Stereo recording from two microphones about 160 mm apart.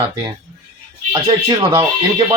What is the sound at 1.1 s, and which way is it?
Speech, 25° right (ahead or behind).